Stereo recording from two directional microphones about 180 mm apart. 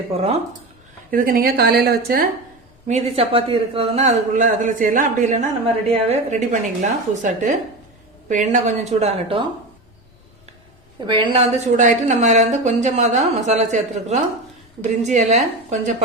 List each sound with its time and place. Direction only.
0.1 s a man's voice: 35° right (ahead or behind)
1.1 s a woman's voice: 50° right (ahead or behind)
2.8 s a man's voice: 35° right (ahead or behind)
11.0 s a woman's voice: 25° right (ahead or behind)
11.8 s a man's voice: 45° right (ahead or behind)